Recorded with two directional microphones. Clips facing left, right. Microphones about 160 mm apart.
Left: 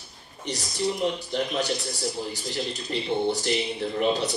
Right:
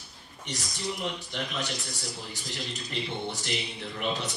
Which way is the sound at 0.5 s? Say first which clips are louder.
Left 7 dB; 35° left (ahead or behind).